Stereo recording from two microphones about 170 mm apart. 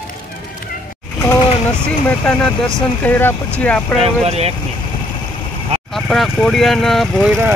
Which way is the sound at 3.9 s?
35° right (ahead or behind).